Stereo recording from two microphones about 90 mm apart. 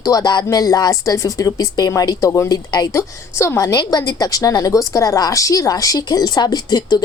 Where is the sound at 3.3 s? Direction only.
35° left (ahead or behind).